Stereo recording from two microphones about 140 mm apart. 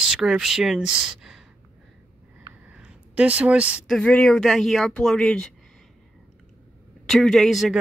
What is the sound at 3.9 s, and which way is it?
Speech, 10° left (ahead or behind).